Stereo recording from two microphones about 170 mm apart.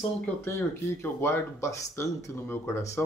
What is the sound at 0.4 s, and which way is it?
Speech, 15° left (ahead or behind).